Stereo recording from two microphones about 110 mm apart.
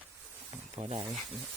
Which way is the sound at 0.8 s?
70° right (ahead or behind).